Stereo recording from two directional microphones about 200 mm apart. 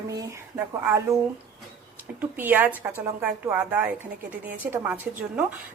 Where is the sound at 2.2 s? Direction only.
10° right (ahead or behind).